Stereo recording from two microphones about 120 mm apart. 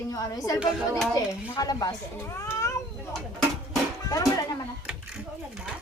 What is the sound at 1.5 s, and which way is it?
Speech, 30° left (ahead or behind).